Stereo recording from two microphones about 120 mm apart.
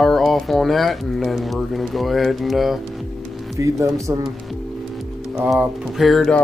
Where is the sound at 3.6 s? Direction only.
30° right (ahead or behind).